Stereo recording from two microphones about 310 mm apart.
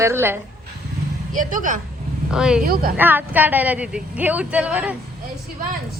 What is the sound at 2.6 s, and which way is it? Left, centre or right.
Speech, right.